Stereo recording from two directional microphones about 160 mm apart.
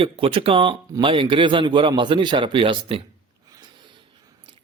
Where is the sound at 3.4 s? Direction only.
25° right (ahead or behind).